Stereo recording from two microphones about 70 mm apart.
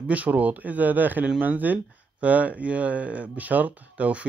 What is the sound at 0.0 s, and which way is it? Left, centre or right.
Speech, right.